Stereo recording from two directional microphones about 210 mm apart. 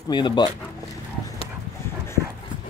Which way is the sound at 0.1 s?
20° left (ahead or behind).